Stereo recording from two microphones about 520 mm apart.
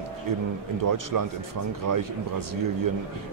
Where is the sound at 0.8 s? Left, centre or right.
Right.